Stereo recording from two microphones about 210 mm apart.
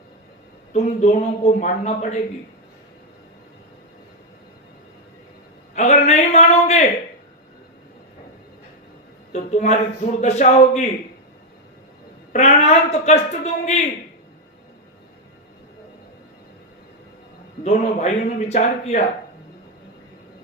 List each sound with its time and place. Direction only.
0.7 s a man's voice: 30° left (ahead or behind)
5.7 s a man's voice: 35° left (ahead or behind)
9.3 s a man's voice: 30° left (ahead or behind)
12.3 s a man's voice: 30° left (ahead or behind)
17.6 s a man's voice: 30° left (ahead or behind)